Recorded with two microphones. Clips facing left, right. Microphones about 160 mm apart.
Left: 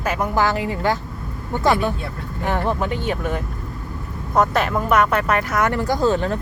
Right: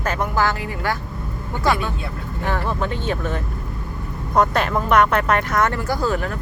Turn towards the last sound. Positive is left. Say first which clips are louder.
# left 3 dB
turn(degrees=25)  # may be behind; listen again after turning